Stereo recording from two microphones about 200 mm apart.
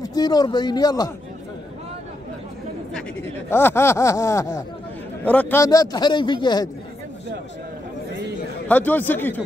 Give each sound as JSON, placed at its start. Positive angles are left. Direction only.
{"t": 0.0, "sound": "a man's voice", "side_deg": 20}
{"t": 3.4, "sound": "a man's voice", "side_deg": 10}
{"t": 8.6, "sound": "speech", "side_deg": 10}